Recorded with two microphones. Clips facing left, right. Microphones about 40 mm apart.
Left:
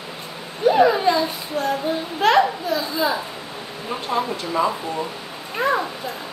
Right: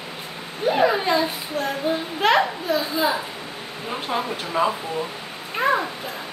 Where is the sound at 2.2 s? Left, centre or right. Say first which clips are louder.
Left 3 dB; centre.